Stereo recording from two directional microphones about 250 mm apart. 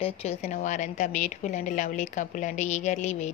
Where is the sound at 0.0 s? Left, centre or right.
Left.